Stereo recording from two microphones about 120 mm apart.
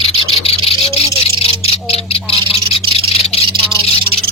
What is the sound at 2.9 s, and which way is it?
Bird, 55° left (ahead or behind).